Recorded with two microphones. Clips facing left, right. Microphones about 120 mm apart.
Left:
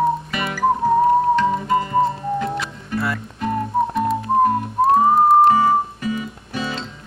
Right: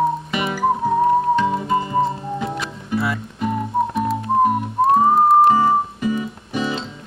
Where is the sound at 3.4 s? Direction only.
5° right (ahead or behind).